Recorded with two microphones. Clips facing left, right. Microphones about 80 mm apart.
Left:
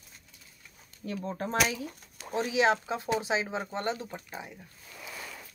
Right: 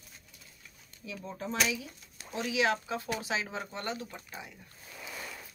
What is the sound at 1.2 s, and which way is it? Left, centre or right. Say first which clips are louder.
Speech: left 3 dB; left.